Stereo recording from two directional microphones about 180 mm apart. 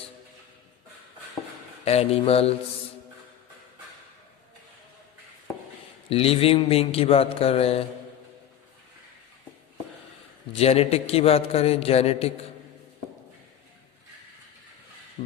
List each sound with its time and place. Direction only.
1.8 s speech: 35° left (ahead or behind)
6.1 s speech: 35° left (ahead or behind)
10.5 s speech: 35° left (ahead or behind)